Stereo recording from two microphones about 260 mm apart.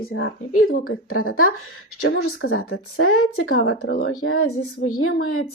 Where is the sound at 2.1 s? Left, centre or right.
Left.